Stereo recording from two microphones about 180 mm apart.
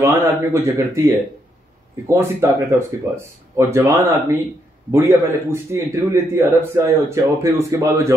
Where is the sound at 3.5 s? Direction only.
15° right (ahead or behind).